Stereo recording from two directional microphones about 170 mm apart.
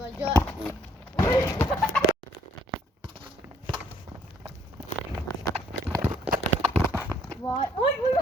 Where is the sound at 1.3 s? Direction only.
25° left (ahead or behind).